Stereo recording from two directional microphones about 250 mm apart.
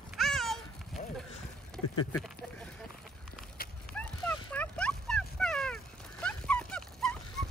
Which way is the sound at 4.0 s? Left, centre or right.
Centre.